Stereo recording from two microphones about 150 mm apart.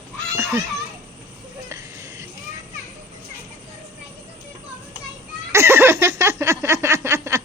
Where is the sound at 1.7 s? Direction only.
20° right (ahead or behind).